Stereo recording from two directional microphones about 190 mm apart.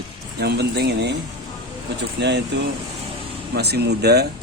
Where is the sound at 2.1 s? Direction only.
65° right (ahead or behind).